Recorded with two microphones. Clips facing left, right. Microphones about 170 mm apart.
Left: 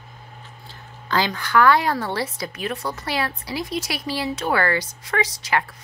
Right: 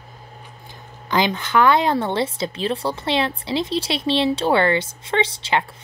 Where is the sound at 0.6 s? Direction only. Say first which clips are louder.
Right 1 dB; 20° right (ahead or behind).